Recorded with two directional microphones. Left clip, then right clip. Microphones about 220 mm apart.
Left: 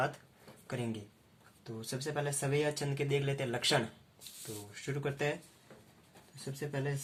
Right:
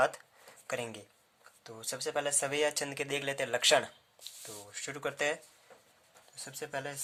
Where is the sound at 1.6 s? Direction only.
45° right (ahead or behind).